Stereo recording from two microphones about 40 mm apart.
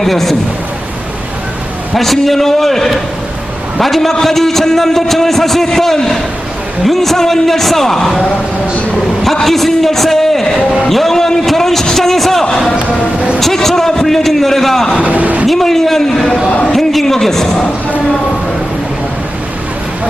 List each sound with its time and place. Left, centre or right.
0.0 s a man's voice: centre
2.0 s a man's voice: centre
15.0 s vehicle: right
15.4 s a man's voice: centre